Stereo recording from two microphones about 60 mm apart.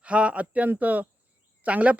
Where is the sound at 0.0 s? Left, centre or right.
Right.